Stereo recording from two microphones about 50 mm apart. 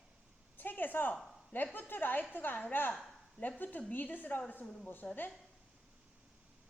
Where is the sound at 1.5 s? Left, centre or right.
Left.